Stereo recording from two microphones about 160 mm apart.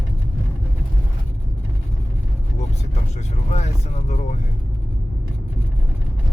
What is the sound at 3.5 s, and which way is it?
Speech, 45° left (ahead or behind).